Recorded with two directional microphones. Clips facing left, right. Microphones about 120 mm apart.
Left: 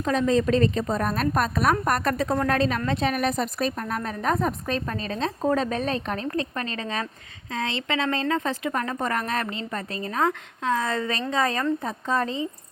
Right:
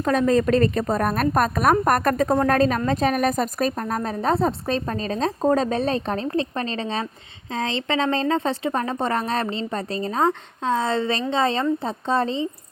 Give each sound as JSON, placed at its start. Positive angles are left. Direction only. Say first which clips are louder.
{"t": 0.0, "sound": "a woman's voice", "louder": "right 3 dB", "side_deg": -50}